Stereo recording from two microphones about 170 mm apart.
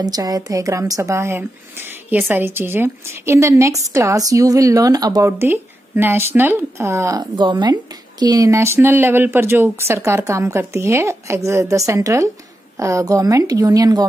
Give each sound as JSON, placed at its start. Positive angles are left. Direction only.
{"t": 0.0, "sound": "a woman's voice", "side_deg": -20}